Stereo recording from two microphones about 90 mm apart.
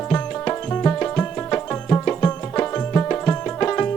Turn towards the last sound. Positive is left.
turn(degrees=20)  # may be behind; listen again after turning